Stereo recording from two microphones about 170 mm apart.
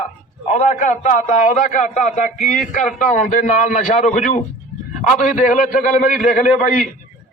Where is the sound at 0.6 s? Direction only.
45° left (ahead or behind).